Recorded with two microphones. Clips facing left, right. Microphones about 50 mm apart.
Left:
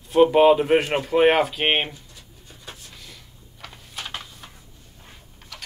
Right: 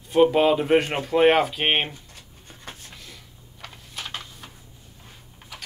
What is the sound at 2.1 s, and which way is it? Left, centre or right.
Pigeon, right.